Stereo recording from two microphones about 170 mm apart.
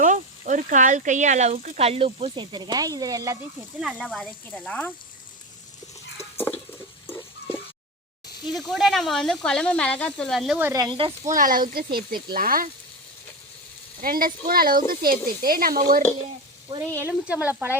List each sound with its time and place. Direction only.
0.0 s speech: 45° right (ahead or behind); by 3.3 s 20° right (ahead or behind)
3.8 s speech: 5° right (ahead or behind)
4.4 s speech: 10° left (ahead or behind)
8.5 s speech: centre (ahead or behind)
10.6 s speech: 20° right (ahead or behind)
11.3 s speech: 50° right (ahead or behind)
14.0 s speech: 55° right (ahead or behind)
16.7 s speech: 15° right (ahead or behind)